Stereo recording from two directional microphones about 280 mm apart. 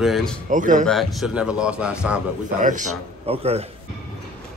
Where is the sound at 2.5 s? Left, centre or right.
Right.